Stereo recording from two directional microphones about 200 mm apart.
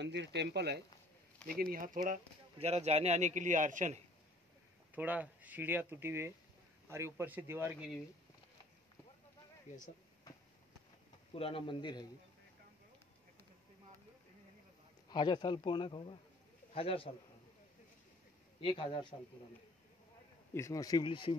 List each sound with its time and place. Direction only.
0.0 s a man's voice: 60° right (ahead or behind); by 4.0 s 40° right (ahead or behind)
4.9 s speech: 10° right (ahead or behind)
11.3 s a man's voice: 25° left (ahead or behind)
15.0 s a man's voice: 20° left (ahead or behind)
18.6 s a man's voice: 25° left (ahead or behind)
20.5 s a man's voice: 15° left (ahead or behind)